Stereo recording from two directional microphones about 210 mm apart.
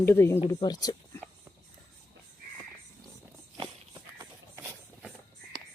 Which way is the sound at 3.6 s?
20° right (ahead or behind).